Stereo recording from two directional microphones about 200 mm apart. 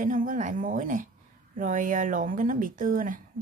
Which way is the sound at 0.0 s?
40° right (ahead or behind).